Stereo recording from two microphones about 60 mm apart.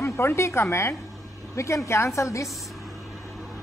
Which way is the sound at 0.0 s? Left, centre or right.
Left.